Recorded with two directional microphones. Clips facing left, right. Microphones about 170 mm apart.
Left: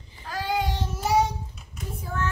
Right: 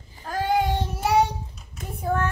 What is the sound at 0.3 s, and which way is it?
Child singing, 50° right (ahead or behind).